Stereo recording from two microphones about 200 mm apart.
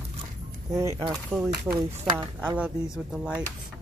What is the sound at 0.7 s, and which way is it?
Speech, 15° right (ahead or behind).